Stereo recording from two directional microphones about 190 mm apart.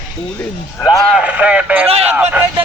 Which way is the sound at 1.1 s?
5° right (ahead or behind).